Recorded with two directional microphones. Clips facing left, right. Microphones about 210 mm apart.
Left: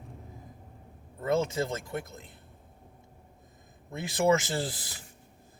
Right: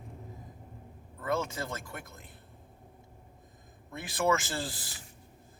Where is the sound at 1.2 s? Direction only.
25° left (ahead or behind).